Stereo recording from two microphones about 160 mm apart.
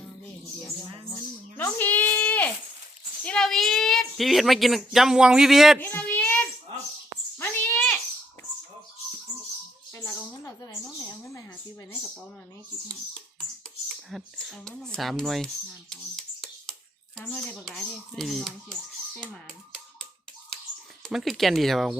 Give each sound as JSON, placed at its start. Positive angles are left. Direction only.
{"t": 1.5, "sound": "bleat", "side_deg": 10}
{"t": 3.2, "sound": "a woman's voice", "side_deg": 5}
{"t": 5.8, "sound": "child singing", "side_deg": 10}
{"t": 7.3, "sound": "a sound", "side_deg": 10}
{"t": 9.9, "sound": "a sound", "side_deg": 15}
{"t": 11.2, "sound": "speech", "side_deg": 20}
{"t": 14.1, "sound": "a woman's voice", "side_deg": 0}
{"t": 17.2, "sound": "a woman's voice", "side_deg": 5}
{"t": 21.0, "sound": "a woman's voice", "side_deg": 0}